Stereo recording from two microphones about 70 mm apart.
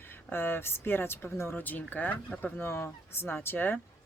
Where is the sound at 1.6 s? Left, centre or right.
Left.